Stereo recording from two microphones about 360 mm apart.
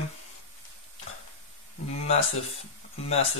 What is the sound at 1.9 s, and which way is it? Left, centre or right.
Speech, centre.